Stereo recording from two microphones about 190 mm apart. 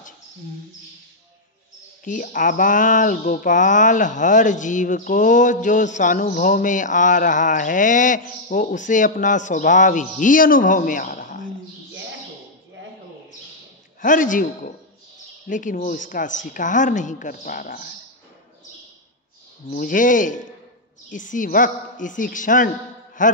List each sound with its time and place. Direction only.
2.0 s speech: 45° left (ahead or behind)
14.0 s speech: 45° left (ahead or behind)
19.7 s speech: 45° left (ahead or behind)